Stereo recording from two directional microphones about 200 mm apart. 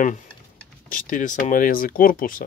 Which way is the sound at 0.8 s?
45° left (ahead or behind).